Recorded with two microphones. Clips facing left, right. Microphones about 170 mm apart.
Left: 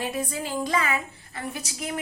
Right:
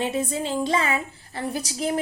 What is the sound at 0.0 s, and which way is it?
A woman's voice, 25° right (ahead or behind).